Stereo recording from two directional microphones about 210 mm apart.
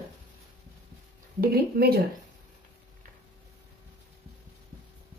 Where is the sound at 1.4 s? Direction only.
45° right (ahead or behind).